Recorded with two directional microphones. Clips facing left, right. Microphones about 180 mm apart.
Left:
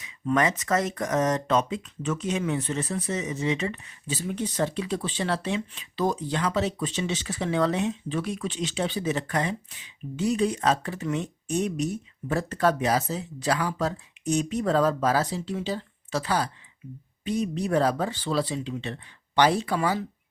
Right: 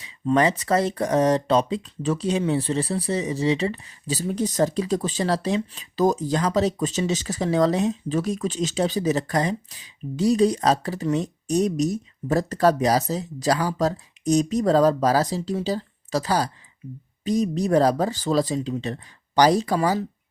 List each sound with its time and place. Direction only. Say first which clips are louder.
0.0 s speech: right 4 dB; 30° right (ahead or behind)